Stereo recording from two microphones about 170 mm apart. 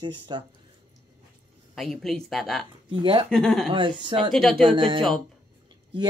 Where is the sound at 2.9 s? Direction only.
30° right (ahead or behind).